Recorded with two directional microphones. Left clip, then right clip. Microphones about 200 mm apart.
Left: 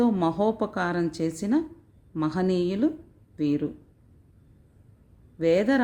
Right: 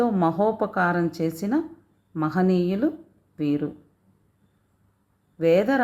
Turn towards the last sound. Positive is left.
turn(degrees=30)  # may be behind; listen again after turning